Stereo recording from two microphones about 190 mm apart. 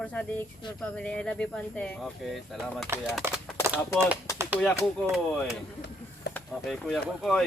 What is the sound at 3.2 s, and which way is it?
Speech, 15° right (ahead or behind).